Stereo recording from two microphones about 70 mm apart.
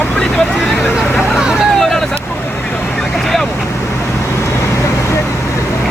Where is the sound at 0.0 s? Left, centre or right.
Centre.